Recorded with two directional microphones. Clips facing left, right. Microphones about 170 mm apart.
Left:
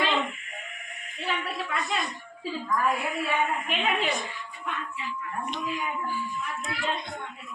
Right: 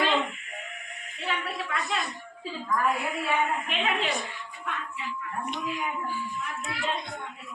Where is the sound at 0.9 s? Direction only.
Centre (ahead or behind).